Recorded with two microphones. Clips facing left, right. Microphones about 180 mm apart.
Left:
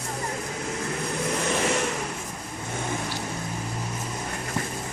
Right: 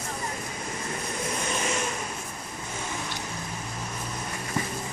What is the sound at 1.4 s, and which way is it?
Vehicle, 65° left (ahead or behind).